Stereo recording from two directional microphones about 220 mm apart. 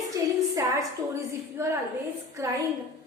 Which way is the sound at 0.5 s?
15° right (ahead or behind).